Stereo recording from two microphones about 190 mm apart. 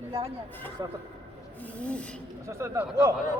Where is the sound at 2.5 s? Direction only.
15° right (ahead or behind).